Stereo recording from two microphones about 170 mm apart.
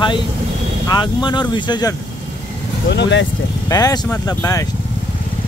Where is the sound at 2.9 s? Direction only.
90° left.